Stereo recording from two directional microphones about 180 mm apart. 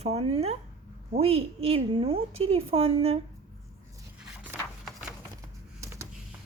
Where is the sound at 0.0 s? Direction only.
35° right (ahead or behind).